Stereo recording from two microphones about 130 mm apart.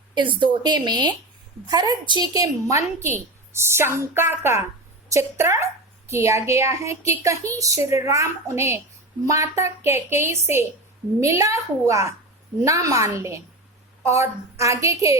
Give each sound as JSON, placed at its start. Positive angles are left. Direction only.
{"t": 0.1, "sound": "a woman's voice", "side_deg": -35}